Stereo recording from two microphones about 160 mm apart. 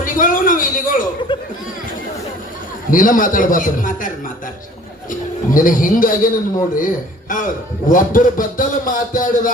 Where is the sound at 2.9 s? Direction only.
55° left (ahead or behind).